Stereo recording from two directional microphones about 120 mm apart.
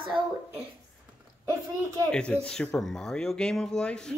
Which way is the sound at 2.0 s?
10° left (ahead or behind).